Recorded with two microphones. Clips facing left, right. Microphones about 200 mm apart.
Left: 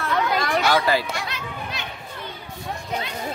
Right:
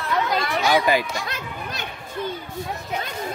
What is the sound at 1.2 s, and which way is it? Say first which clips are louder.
Chatter: even; 45° right (ahead or behind).